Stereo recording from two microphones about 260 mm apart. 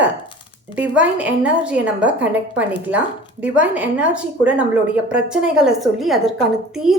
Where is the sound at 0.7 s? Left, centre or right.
Centre.